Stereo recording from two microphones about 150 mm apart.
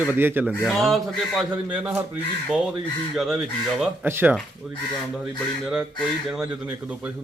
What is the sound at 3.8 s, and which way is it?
Speech, 15° right (ahead or behind).